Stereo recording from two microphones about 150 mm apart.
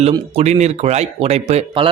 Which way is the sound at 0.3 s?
45° right (ahead or behind).